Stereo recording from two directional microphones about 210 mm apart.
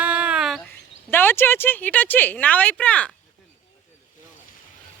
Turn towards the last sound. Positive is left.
turn(degrees=5)  # may be behind; listen again after turning